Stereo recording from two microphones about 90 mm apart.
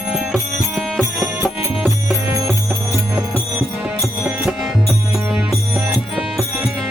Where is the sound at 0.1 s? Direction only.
Centre (ahead or behind).